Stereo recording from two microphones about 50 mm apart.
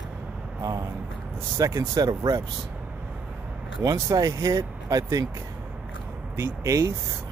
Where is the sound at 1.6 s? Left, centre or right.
Right.